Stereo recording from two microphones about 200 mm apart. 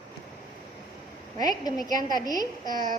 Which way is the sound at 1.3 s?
20° left (ahead or behind).